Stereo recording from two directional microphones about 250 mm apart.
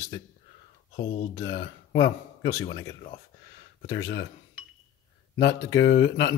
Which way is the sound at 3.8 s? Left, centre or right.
Left.